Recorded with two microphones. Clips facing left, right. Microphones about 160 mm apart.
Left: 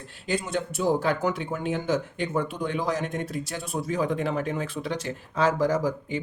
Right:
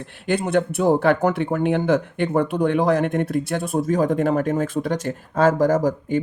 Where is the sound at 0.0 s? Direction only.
60° right (ahead or behind).